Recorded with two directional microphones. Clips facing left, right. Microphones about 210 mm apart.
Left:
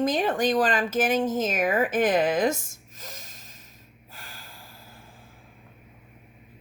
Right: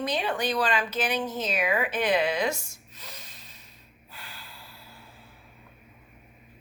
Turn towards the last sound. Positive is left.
turn(degrees=45)  # may be behind; listen again after turning